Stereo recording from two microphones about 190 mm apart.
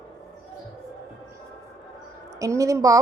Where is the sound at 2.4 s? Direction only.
15° right (ahead or behind).